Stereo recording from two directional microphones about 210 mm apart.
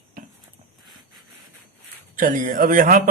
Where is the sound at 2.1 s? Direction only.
40° right (ahead or behind).